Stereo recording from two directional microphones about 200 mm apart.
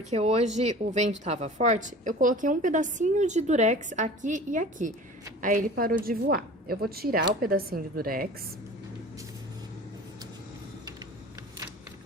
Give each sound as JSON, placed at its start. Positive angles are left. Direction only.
{"t": 0.1, "sound": "a woman's voice", "side_deg": -35}